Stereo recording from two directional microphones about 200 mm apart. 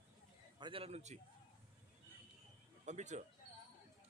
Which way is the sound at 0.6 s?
30° right (ahead or behind).